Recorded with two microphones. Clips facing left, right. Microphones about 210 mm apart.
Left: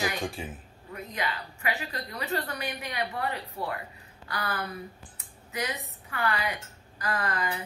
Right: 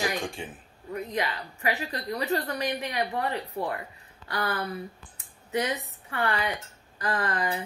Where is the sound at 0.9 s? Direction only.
35° right (ahead or behind).